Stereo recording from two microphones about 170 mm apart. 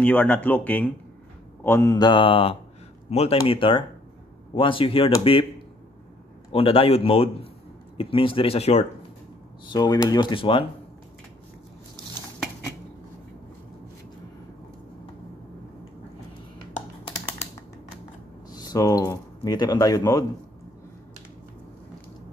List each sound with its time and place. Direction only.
0.0 s speech: 10° left (ahead or behind)
1.6 s mantra: 15° left (ahead or behind); by 2.5 s 30° left (ahead or behind)
3.1 s a man's voice: 40° left (ahead or behind)
6.5 s a man's voice: 35° left (ahead or behind)
9.7 s mantra: 25° left (ahead or behind)
18.5 s speech: 20° left (ahead or behind)